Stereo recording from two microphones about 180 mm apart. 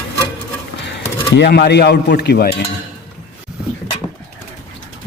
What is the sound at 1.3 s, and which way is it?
A man's voice, 65° left (ahead or behind).